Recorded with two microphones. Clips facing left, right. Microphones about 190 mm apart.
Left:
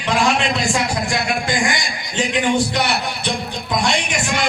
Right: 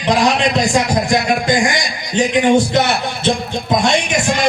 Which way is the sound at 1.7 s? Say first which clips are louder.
Right 6 dB; 20° right (ahead or behind).